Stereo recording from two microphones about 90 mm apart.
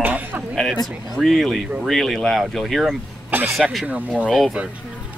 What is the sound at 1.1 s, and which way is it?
Speech, centre (ahead or behind).